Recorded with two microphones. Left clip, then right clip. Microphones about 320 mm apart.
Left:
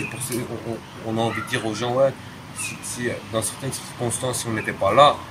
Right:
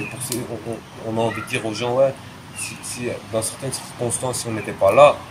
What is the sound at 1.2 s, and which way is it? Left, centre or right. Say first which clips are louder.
Speech: right 2 dB; centre.